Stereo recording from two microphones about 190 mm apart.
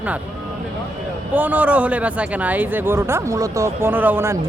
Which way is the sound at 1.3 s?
10° right (ahead or behind).